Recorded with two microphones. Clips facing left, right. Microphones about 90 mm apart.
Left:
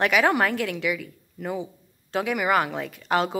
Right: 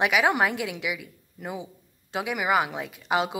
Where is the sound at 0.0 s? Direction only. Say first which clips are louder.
Left 1 dB; 10° right (ahead or behind).